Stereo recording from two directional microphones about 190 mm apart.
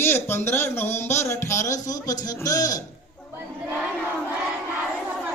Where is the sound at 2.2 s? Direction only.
20° left (ahead or behind).